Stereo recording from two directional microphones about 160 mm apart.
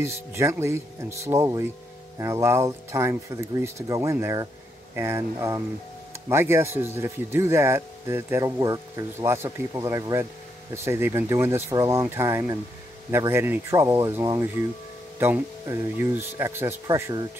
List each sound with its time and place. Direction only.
0.0 s speech: 15° right (ahead or behind)